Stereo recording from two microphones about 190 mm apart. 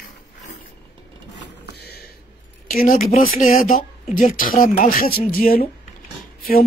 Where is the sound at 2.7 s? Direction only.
45° left (ahead or behind).